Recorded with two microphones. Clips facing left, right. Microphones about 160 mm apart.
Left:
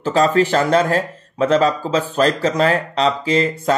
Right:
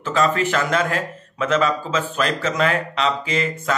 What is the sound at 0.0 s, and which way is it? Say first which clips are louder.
Speech: left 5 dB; 35° left (ahead or behind).